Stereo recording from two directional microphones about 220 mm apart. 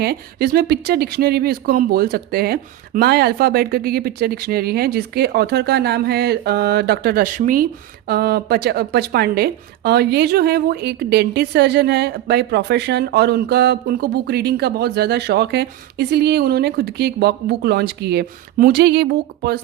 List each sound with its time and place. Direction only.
0.0 s speech: 45° right (ahead or behind)